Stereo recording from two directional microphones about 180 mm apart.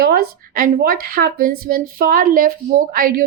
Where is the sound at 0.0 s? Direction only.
55° right (ahead or behind).